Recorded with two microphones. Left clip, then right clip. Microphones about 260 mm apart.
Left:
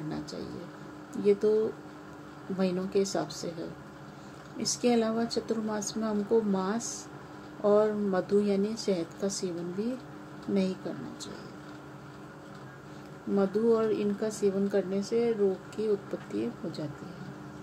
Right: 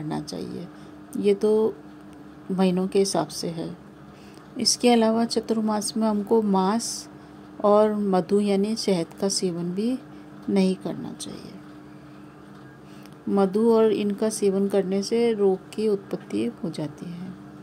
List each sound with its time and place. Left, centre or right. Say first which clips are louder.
1.1 s a woman's voice: right 4 dB; right
2.5 s a woman's voice: right 6 dB; right
13.4 s a woman's voice: right 7 dB; right